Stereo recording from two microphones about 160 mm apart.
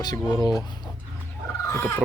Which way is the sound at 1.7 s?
15° left (ahead or behind).